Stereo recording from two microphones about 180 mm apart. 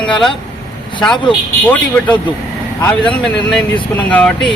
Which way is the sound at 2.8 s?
5° left (ahead or behind).